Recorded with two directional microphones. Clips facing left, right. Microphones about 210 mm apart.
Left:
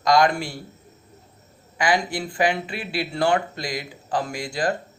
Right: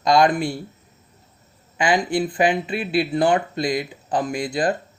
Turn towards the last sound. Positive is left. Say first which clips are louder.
# right 4 dB
turn(degrees=-20)  # may be behind; listen again after turning